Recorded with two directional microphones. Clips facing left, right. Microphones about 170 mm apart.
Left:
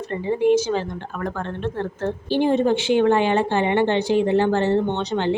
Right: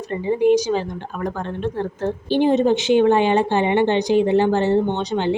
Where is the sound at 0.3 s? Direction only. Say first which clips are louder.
Right 2 dB; 15° right (ahead or behind).